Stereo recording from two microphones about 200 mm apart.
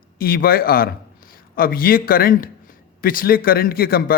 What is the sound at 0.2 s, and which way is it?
A man's voice, 45° left (ahead or behind).